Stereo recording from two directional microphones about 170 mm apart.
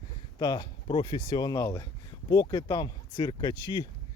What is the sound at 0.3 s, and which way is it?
Speech, 25° left (ahead or behind).